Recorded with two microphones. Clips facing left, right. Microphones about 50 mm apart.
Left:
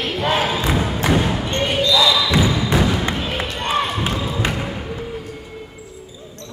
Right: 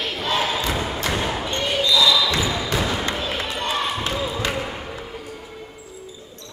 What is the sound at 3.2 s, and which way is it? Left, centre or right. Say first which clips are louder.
Basketball bounce: left 2 dB; centre.